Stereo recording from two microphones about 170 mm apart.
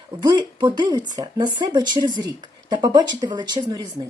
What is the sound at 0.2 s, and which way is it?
Speech, 25° right (ahead or behind).